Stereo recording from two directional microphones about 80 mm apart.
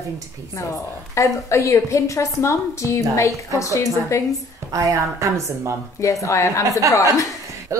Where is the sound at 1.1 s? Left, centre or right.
Left.